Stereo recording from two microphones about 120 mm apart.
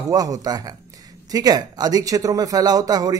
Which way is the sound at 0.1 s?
30° right (ahead or behind).